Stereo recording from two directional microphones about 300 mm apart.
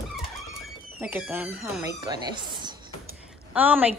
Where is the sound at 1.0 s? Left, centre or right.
Centre.